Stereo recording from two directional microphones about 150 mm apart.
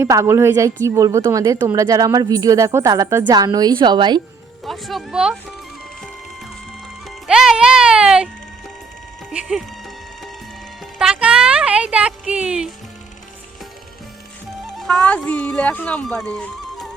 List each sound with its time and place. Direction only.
0.0 s speech: 20° right (ahead or behind)
4.6 s speech: centre (ahead or behind)
7.3 s music: 5° right (ahead or behind)
9.3 s music: 5° right (ahead or behind)
10.9 s music: 5° right (ahead or behind)
14.8 s speech: 5° left (ahead or behind)